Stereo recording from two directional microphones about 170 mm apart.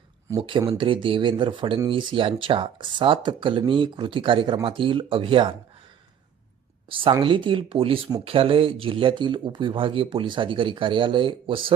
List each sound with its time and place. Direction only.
0.3 s speech: 25° right (ahead or behind)
6.8 s speech: 30° right (ahead or behind)